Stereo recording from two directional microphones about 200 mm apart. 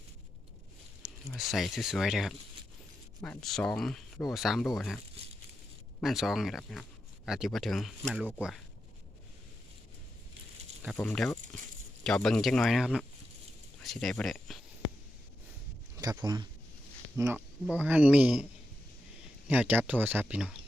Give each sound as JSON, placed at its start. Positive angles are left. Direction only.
{"t": 1.0, "sound": "a sound", "side_deg": -5}
{"t": 1.4, "sound": "speech", "side_deg": 0}
{"t": 6.0, "sound": "speech", "side_deg": 0}
{"t": 10.9, "sound": "speech", "side_deg": 5}
{"t": 16.0, "sound": "speech", "side_deg": -20}
{"t": 19.5, "sound": "speech", "side_deg": -10}